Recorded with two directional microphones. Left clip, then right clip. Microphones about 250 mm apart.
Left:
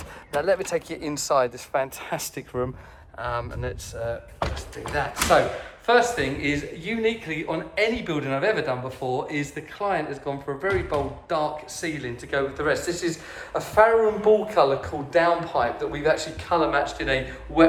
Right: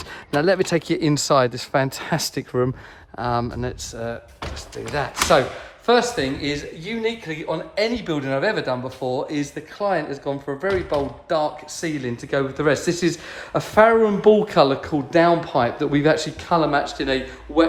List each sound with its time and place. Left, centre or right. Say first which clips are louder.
0.4 s speech: right 5 dB; right
3.2 s speech: right 5 dB; right